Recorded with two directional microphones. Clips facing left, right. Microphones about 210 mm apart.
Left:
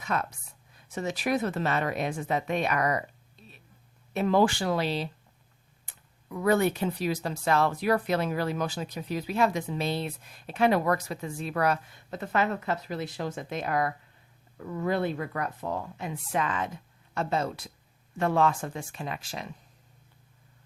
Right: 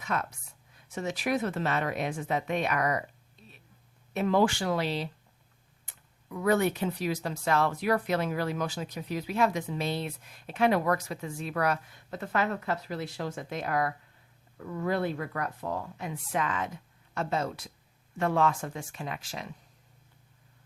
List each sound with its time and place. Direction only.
0.0 s a woman's voice: 35° left (ahead or behind)
4.1 s speech: 35° left (ahead or behind)
5.9 s a sound: 30° left (ahead or behind)
6.3 s a woman's voice: 30° left (ahead or behind)